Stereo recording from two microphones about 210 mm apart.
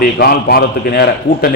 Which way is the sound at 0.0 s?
45° left (ahead or behind).